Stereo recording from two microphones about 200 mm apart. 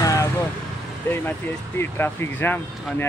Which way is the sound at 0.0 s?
15° left (ahead or behind).